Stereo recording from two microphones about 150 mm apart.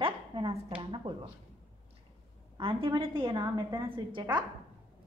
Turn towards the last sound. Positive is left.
turn(degrees=-30)  # may be behind; listen again after turning